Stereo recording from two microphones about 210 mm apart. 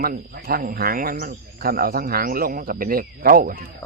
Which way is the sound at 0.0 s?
45° right (ahead or behind).